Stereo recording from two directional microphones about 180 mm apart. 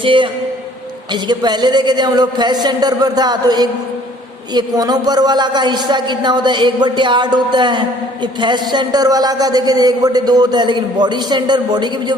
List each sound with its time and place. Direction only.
0.0 s a man's voice: 30° right (ahead or behind)